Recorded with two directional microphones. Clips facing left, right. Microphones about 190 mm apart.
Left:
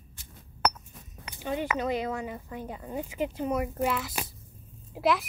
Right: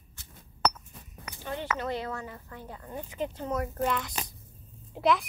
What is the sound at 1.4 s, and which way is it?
A child's voice, 15° left (ahead or behind).